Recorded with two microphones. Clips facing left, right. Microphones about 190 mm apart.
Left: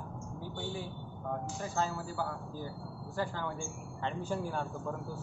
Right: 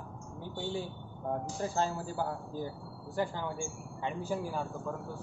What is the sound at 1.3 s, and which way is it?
Speech, 30° right (ahead or behind).